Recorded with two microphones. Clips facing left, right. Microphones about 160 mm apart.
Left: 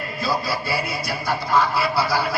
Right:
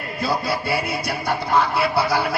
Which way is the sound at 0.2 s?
55° right (ahead or behind).